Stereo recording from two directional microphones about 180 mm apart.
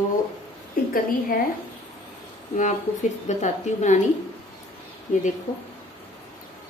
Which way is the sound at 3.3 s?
40° left (ahead or behind).